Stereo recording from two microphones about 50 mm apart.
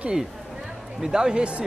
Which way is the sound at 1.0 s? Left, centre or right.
Centre.